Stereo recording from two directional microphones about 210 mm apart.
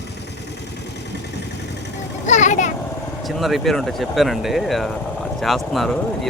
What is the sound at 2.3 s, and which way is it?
Vehicle, 35° left (ahead or behind).